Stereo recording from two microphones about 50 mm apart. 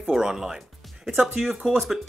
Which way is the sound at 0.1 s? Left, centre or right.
Centre.